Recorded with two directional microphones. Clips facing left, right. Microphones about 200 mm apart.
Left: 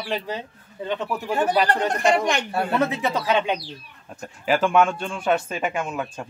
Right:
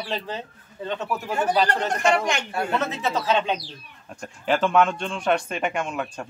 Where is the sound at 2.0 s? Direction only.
35° left (ahead or behind).